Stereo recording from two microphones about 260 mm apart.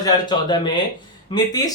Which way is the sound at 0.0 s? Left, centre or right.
Centre.